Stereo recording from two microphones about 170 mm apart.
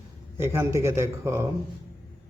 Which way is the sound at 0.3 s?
15° right (ahead or behind).